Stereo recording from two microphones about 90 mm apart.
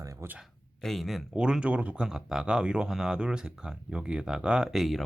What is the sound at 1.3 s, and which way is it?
Speech, 10° right (ahead or behind).